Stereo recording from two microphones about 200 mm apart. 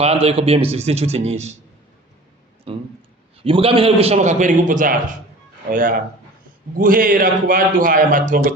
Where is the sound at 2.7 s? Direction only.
30° right (ahead or behind).